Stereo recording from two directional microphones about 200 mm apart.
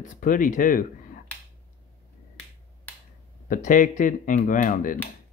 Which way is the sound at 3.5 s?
40° left (ahead or behind).